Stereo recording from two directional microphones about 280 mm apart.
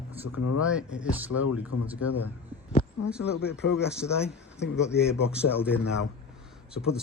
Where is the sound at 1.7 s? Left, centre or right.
Left.